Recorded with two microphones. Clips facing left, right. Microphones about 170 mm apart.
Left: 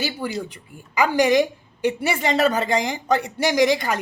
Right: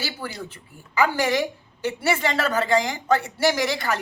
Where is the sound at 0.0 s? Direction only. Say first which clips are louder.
Left 6 dB; 15° left (ahead or behind).